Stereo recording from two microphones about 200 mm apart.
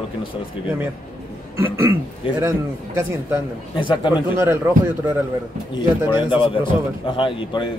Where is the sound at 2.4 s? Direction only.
15° right (ahead or behind).